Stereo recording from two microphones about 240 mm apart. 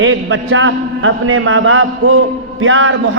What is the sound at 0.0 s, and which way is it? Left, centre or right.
A man's voice, right.